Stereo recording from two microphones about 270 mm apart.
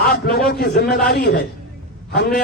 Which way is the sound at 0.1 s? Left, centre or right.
Left.